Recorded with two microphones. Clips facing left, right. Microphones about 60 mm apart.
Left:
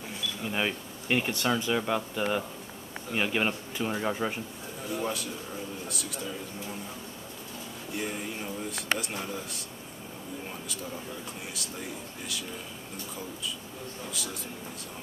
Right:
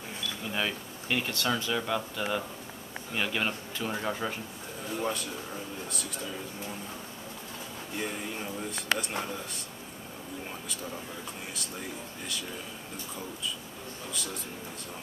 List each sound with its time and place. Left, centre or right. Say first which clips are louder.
0.5 s speech: left 2 dB; centre
8.0 s speech: even; centre